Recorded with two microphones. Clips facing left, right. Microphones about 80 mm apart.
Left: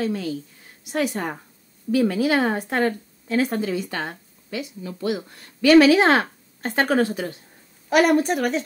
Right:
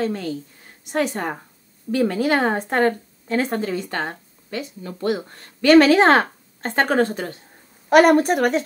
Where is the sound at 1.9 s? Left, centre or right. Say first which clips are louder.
Even; centre.